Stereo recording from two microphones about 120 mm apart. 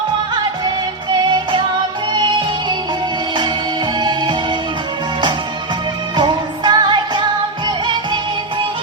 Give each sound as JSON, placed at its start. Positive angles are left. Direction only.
{"t": 2.1, "sound": "music", "side_deg": -40}
{"t": 6.1, "sound": "music", "side_deg": -40}